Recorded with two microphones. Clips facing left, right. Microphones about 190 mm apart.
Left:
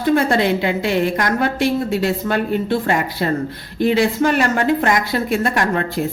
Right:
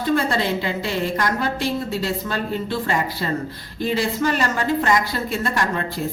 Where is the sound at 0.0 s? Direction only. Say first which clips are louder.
Left 5 dB; 60° left (ahead or behind).